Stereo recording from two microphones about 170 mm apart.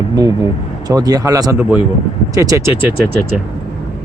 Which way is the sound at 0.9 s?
20° right (ahead or behind).